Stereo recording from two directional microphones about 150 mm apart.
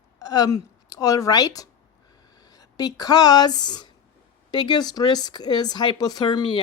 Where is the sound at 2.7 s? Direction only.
25° left (ahead or behind).